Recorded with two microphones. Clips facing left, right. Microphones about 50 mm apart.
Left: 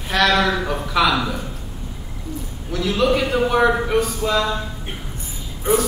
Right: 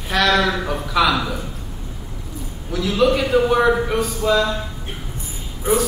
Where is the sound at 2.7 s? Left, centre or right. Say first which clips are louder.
Right 1 dB; centre.